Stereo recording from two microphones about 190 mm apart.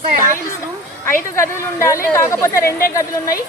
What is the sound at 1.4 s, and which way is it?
Speech, 15° left (ahead or behind).